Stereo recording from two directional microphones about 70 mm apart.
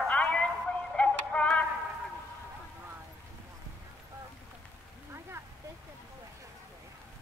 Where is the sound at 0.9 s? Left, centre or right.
Centre.